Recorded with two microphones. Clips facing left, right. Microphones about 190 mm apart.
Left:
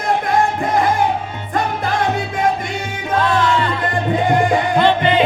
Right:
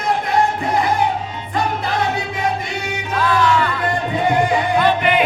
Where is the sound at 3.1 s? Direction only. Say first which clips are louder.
Left 1 dB; 25° left (ahead or behind).